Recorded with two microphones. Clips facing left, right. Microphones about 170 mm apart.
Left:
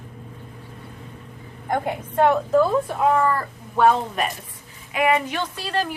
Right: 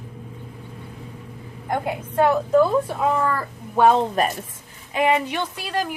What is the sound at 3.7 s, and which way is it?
A woman's voice, 20° right (ahead or behind).